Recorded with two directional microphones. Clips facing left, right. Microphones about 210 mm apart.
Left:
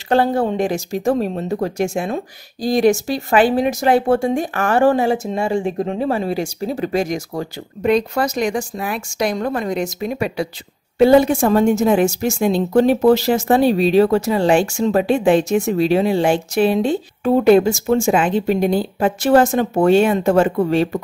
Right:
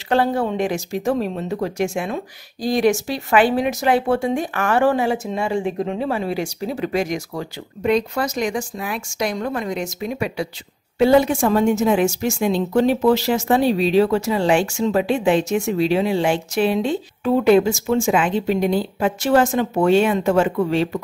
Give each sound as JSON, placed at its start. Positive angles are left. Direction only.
{"t": 0.1, "sound": "speech", "side_deg": 40}